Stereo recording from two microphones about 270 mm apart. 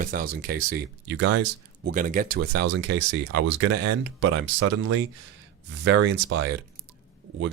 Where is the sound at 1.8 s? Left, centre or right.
Right.